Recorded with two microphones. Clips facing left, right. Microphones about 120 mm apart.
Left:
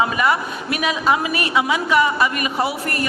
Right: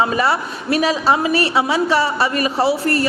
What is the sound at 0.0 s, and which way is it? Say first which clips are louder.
A woman's voice: right 1 dB; 35° right (ahead or behind).